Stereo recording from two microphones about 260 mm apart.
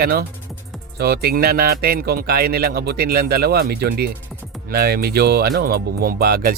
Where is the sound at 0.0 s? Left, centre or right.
Right.